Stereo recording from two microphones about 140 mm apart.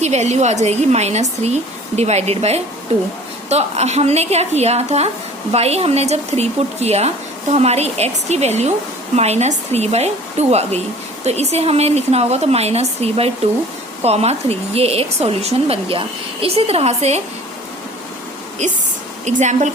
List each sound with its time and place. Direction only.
0.0 s speech: 50° right (ahead or behind)
18.6 s a woman's voice: 60° right (ahead or behind)